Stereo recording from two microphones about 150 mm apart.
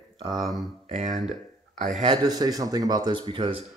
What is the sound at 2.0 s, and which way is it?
Speech, 30° right (ahead or behind).